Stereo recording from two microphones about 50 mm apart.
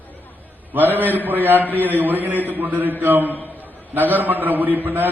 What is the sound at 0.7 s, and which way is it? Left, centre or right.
Speech, right.